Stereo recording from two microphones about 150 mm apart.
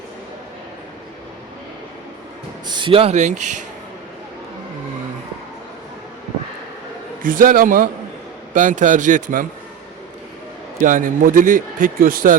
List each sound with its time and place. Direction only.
2.6 s speech: 30° right (ahead or behind); by 3.6 s 55° right (ahead or behind)
7.2 s a man's voice: 65° right (ahead or behind)
8.5 s a man's voice: 55° right (ahead or behind)
10.8 s a man's voice: 60° right (ahead or behind)